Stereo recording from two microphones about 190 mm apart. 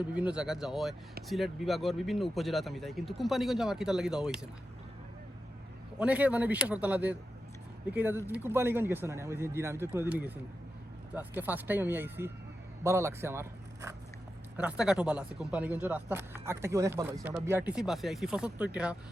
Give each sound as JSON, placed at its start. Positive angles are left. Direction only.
{"t": 0.1, "sound": "speech", "side_deg": -5}
{"t": 6.0, "sound": "speech", "side_deg": -5}